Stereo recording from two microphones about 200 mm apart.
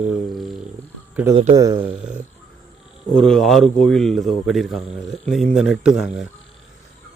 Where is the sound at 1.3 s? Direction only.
25° right (ahead or behind).